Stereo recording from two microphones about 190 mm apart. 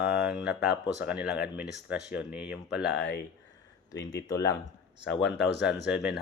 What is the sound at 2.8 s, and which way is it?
Speech, 65° left (ahead or behind).